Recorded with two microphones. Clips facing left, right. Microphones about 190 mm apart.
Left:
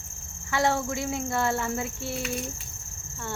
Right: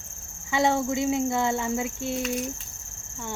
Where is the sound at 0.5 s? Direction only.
20° right (ahead or behind).